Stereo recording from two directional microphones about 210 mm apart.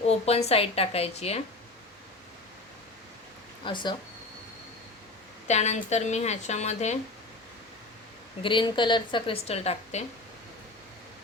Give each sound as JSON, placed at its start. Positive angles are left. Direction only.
{"t": 0.3, "sound": "a woman's voice", "side_deg": 30}
{"t": 3.6, "sound": "a woman's voice", "side_deg": 20}
{"t": 5.5, "sound": "a woman's voice", "side_deg": 35}
{"t": 8.4, "sound": "a woman's voice", "side_deg": 25}